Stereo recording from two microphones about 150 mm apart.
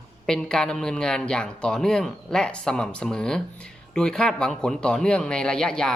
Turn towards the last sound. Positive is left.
turn(degrees=5)  # may be behind; listen again after turning